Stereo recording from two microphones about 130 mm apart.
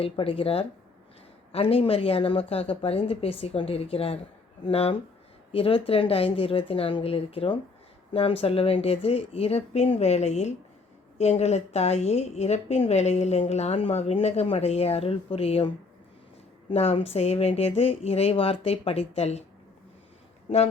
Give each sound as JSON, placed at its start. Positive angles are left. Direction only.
{"t": 0.0, "sound": "a woman's voice", "side_deg": 45}
{"t": 16.7, "sound": "speech", "side_deg": 50}